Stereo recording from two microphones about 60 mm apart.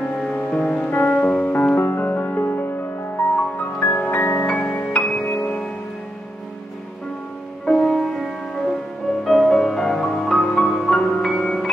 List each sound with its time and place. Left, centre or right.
0.5 s music: left
4.8 s music: centre
7.6 s music: centre